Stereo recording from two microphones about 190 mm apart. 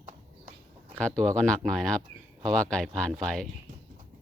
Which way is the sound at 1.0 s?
5° left (ahead or behind).